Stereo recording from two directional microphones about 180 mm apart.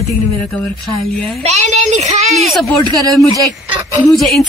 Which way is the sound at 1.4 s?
40° right (ahead or behind).